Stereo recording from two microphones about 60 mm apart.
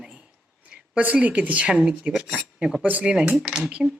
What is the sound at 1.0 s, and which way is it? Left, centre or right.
A woman's voice, right.